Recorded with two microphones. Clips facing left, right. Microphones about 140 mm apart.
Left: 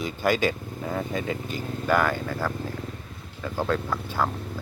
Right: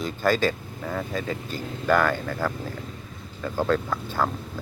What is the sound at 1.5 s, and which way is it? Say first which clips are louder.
Speech: right 2 dB; 10° left (ahead or behind).